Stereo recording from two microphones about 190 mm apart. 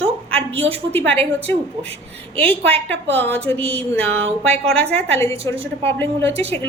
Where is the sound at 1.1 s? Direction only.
10° left (ahead or behind).